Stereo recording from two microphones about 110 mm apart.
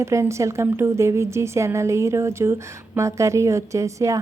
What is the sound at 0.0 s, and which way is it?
A woman's voice, 25° right (ahead or behind).